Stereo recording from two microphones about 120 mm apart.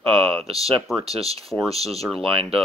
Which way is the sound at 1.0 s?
55° right (ahead or behind).